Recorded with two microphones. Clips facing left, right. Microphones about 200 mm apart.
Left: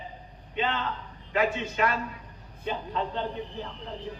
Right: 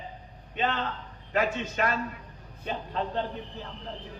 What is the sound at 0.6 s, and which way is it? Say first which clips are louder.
A man's voice: even; 45° right (ahead or behind).